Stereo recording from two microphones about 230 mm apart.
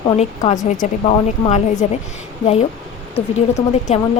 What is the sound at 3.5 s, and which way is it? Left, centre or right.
Speech, left.